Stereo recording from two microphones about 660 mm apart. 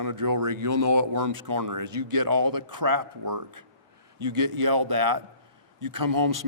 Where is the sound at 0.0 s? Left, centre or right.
Right.